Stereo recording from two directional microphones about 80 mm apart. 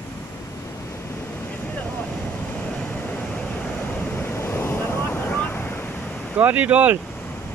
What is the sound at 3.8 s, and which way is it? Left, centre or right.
Waves, left.